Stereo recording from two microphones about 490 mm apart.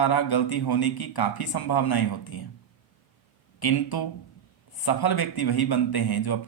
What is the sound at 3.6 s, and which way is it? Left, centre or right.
A man's voice, left.